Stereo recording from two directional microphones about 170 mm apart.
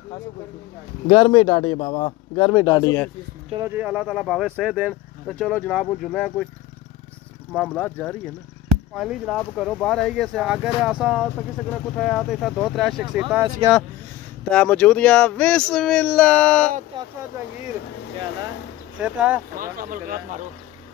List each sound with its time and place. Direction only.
1.0 s speech: 35° left (ahead or behind)
3.5 s speech: 15° right (ahead or behind); by 6.5 s 5° left (ahead or behind)
7.5 s speech: 5° left (ahead or behind)
8.9 s speech: 5° right (ahead or behind)
14.5 s speech: 5° left (ahead or behind)
18.9 s speech: 5° right (ahead or behind)
19.6 s speech: 55° right (ahead or behind)